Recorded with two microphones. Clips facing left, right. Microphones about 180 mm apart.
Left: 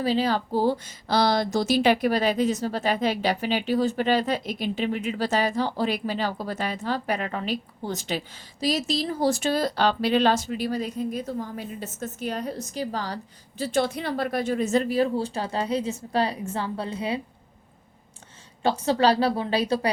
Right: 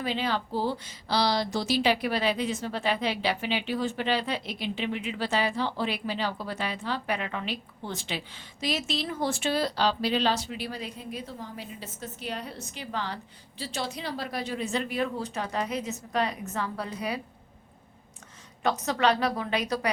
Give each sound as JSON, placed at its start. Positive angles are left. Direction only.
{"t": 0.0, "sound": "a woman's voice", "side_deg": 35}
{"t": 18.6, "sound": "a woman's voice", "side_deg": 30}